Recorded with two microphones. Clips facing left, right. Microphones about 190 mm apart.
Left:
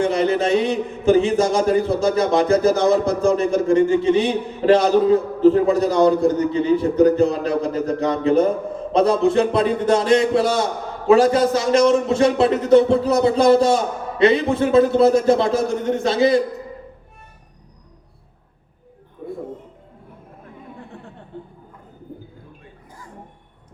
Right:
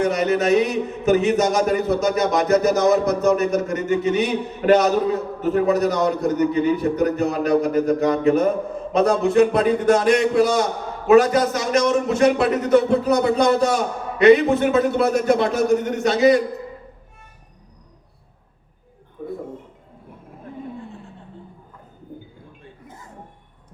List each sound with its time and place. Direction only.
0.0 s a man's voice: 30° left (ahead or behind)